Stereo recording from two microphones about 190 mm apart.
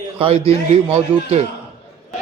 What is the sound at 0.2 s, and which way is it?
A man's voice, 30° right (ahead or behind).